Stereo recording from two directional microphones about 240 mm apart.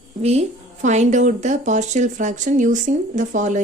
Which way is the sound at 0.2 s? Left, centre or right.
Right.